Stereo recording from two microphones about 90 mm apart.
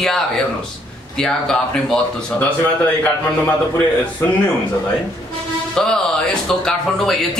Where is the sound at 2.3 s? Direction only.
20° left (ahead or behind).